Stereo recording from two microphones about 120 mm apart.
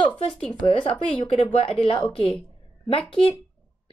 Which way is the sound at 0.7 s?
55° left (ahead or behind).